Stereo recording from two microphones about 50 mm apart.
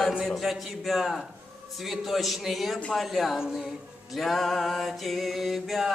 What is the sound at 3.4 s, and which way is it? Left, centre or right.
Speech, centre.